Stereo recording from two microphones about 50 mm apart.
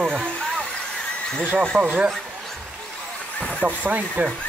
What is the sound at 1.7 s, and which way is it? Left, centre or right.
Speech, right.